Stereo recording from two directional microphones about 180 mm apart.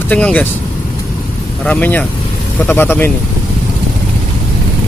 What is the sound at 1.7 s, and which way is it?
Speech, 10° left (ahead or behind).